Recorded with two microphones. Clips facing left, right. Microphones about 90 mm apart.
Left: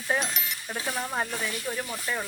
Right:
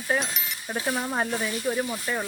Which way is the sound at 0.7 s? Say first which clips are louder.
Right 4 dB; 10° right (ahead or behind).